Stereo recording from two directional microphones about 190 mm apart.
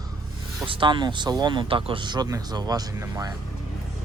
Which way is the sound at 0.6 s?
25° right (ahead or behind).